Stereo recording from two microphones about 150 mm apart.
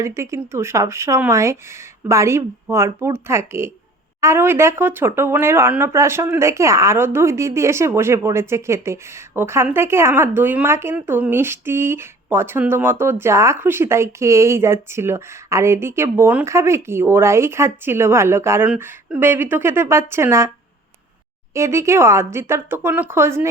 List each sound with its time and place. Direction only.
0.0 s speech: 20° right (ahead or behind)
21.5 s speech: 20° right (ahead or behind)